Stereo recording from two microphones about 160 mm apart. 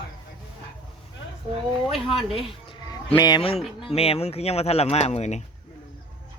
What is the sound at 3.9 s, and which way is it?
Speech, 40° left (ahead or behind).